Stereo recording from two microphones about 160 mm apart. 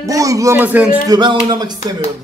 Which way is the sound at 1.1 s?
25° right (ahead or behind).